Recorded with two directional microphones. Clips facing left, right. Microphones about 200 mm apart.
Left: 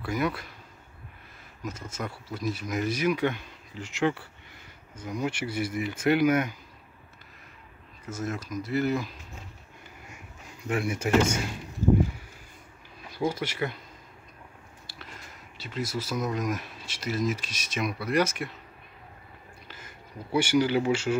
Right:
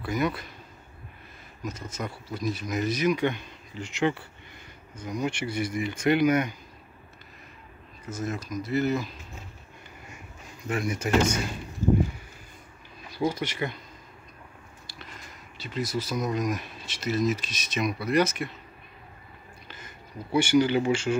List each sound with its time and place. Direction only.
0.0 s speech: 10° left (ahead or behind)
1.6 s speech: 10° left (ahead or behind)
8.1 s speech: 10° left (ahead or behind)
10.6 s speech: 10° left (ahead or behind)
13.2 s speech: 5° left (ahead or behind)
15.5 s speech: 5° left (ahead or behind)
20.3 s speech: 10° left (ahead or behind)